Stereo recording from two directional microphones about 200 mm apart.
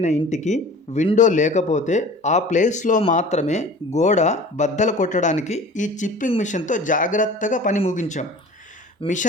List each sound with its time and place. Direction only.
0.0 s speech: 35° left (ahead or behind)
9.0 s speech: 25° left (ahead or behind)